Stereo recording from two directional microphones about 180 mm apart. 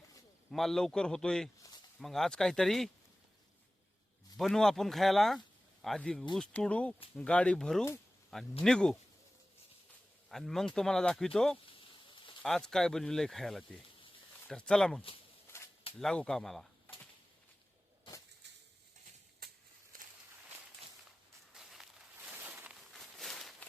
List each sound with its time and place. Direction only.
0.5 s speech: centre (ahead or behind)
4.4 s speech: centre (ahead or behind)
10.2 s speech: centre (ahead or behind)
11.8 s a sound: 30° left (ahead or behind)
12.4 s speech: 5° left (ahead or behind)
15.4 s a sound: 15° left (ahead or behind)
16.0 s speech: 5° left (ahead or behind)
18.4 s bird: 75° right (ahead or behind)
19.4 s a sound: 60° right (ahead or behind)
21.5 s walk: centre (ahead or behind)